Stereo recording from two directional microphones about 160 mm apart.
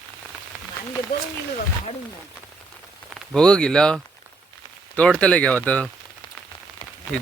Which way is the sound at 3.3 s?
5° left (ahead or behind).